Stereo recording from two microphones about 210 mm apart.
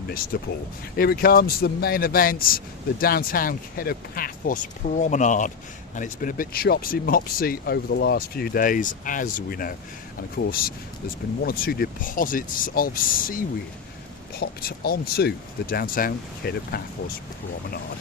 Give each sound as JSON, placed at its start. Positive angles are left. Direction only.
{"t": 0.3, "sound": "speech", "side_deg": 50}